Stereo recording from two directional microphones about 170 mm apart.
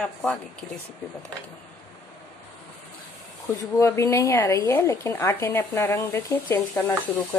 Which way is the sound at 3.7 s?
15° left (ahead or behind).